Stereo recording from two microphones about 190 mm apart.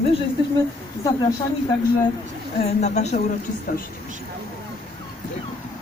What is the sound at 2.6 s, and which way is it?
Speech, 35° left (ahead or behind).